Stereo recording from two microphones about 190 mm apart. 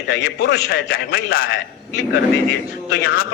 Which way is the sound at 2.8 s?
55° left (ahead or behind).